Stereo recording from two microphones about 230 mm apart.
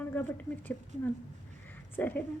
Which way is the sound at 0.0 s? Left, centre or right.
Centre.